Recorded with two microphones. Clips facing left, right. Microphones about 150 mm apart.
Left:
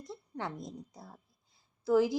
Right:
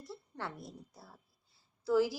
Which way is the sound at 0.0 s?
20° left (ahead or behind).